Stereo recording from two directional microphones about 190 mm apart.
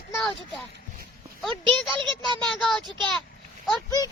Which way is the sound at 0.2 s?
Centre (ahead or behind).